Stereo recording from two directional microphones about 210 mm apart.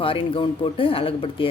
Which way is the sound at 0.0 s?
25° left (ahead or behind).